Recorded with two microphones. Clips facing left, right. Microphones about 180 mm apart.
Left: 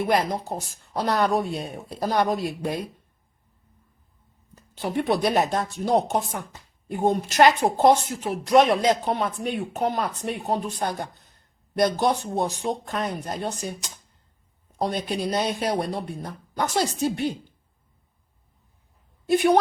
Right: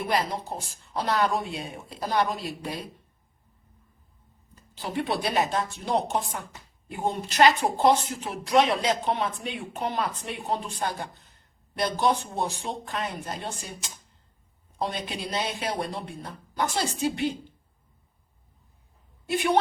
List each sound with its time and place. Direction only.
0.1 s speech: 45° left (ahead or behind)
5.0 s speech: 45° left (ahead or behind)
19.3 s speech: 40° left (ahead or behind)